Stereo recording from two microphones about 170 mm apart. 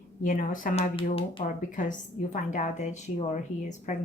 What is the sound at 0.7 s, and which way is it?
Speech, 35° left (ahead or behind).